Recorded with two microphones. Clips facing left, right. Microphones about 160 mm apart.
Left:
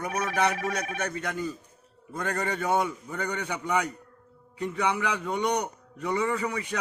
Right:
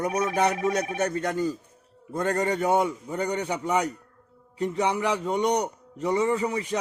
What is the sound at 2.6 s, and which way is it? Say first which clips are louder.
Speech: right 3 dB; 20° right (ahead or behind).